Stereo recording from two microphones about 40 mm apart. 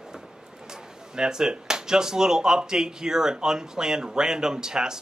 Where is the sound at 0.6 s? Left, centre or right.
Centre.